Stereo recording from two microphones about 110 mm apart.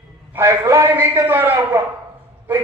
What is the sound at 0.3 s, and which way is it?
Speech, 25° right (ahead or behind).